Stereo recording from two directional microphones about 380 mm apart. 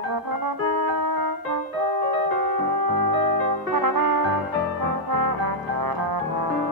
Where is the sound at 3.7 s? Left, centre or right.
Right.